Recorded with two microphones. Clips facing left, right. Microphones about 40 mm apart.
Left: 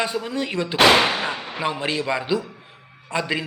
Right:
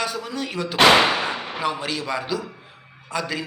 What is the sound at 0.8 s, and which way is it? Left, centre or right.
Speech, centre.